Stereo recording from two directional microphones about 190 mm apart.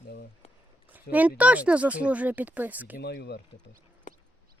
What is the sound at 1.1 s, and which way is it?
Speech, 10° right (ahead or behind).